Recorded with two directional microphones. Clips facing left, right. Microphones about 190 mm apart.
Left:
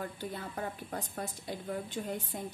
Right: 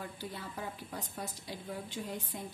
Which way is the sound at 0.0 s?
50° left (ahead or behind).